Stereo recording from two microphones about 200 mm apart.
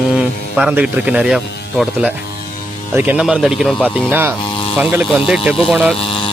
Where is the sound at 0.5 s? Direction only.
5° right (ahead or behind).